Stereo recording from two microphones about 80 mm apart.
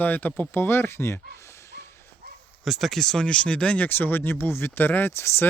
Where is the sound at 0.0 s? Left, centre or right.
Left.